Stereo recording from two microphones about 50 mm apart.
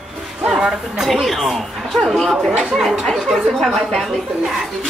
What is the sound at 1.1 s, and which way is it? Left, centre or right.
A woman's voice, centre.